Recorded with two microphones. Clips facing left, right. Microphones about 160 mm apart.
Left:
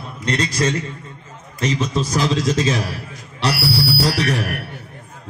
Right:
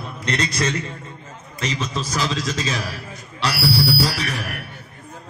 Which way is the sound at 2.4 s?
55° left (ahead or behind).